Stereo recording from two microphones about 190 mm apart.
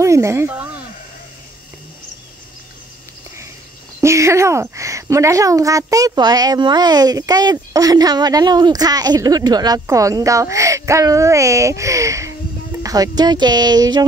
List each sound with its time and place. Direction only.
0.0 s speech: 15° right (ahead or behind)
4.0 s speech: 15° right (ahead or behind)